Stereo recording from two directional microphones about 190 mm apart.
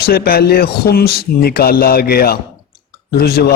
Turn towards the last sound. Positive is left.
turn(degrees=55)  # may be behind; listen again after turning